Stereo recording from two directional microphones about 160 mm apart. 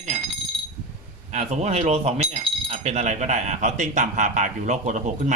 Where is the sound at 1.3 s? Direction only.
45° right (ahead or behind).